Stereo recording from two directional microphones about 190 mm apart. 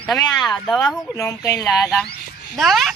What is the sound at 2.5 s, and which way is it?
Speech, centre (ahead or behind).